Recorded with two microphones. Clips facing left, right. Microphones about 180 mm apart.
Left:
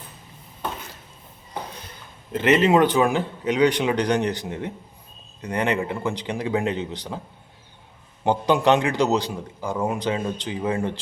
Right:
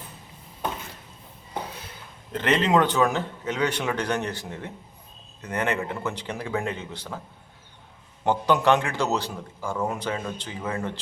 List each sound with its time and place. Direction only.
2.3 s speech: 10° left (ahead or behind)
8.2 s speech: 10° left (ahead or behind)